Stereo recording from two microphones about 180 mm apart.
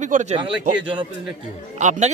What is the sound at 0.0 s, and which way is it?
Speech, 40° right (ahead or behind).